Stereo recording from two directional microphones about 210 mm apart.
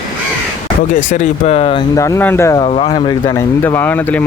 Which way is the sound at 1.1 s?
35° left (ahead or behind).